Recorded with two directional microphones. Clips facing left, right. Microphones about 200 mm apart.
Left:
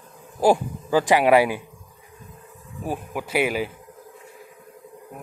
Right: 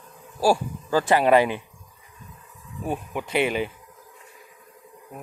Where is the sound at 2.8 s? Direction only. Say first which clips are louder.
Even; 5° left (ahead or behind).